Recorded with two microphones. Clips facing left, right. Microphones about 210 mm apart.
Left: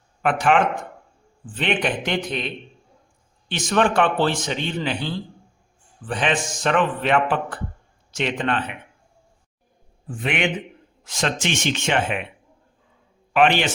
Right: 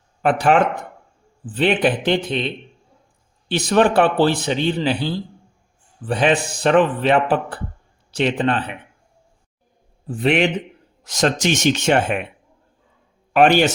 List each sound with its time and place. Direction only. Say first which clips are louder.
0.2 s a man's voice: right 3 dB; 35° right (ahead or behind)
3.5 s a man's voice: right 4 dB; 35° right (ahead or behind)
10.1 s a man's voice: right 6 dB; 35° right (ahead or behind)
13.3 s a man's voice: right 4 dB; 45° right (ahead or behind)